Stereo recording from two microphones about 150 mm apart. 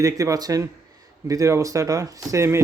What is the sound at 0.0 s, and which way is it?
Speech, 20° right (ahead or behind).